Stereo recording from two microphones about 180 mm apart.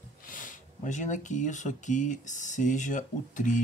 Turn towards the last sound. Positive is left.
turn(degrees=45)  # may be behind; listen again after turning